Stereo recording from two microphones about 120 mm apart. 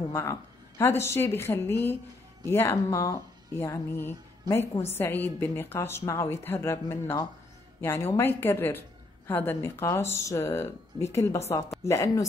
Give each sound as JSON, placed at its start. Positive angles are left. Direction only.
{"t": 0.1, "sound": "speech", "side_deg": 20}